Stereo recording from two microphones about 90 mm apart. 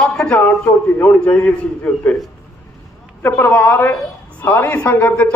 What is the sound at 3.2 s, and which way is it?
A man's voice, 25° left (ahead or behind).